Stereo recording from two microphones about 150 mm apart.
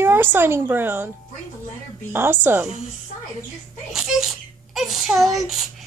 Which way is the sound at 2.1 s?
15° right (ahead or behind).